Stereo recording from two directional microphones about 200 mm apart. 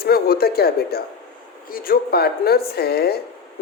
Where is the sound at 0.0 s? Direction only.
50° left (ahead or behind).